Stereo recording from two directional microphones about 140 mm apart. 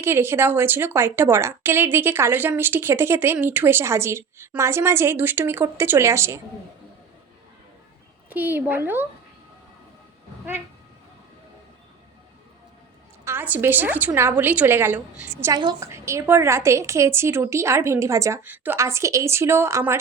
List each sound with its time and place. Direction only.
0.0 s a woman's voice: 15° right (ahead or behind)
8.3 s a woman's voice: 15° right (ahead or behind)
13.2 s a woman's voice: 15° right (ahead or behind)
15.5 s a woman's voice: 25° right (ahead or behind)